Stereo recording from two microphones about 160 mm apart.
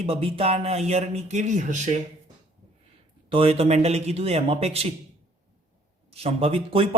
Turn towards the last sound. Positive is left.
turn(degrees=-35)  # may be behind; listen again after turning